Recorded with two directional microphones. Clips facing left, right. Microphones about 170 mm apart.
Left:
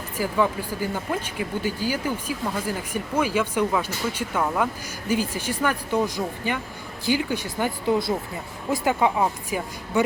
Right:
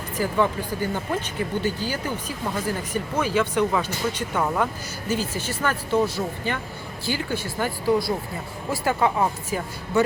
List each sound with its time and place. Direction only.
0.2 s speech: 10° left (ahead or behind)
5.0 s speech: 15° left (ahead or behind)